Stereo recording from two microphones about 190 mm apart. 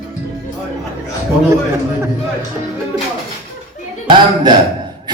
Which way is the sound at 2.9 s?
15° right (ahead or behind).